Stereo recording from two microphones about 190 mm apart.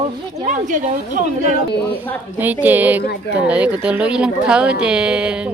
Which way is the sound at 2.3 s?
10° right (ahead or behind).